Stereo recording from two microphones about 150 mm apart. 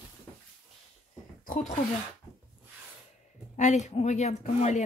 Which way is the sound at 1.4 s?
65° left (ahead or behind).